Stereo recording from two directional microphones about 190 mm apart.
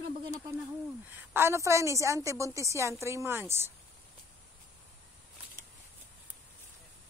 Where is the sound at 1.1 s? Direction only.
10° right (ahead or behind).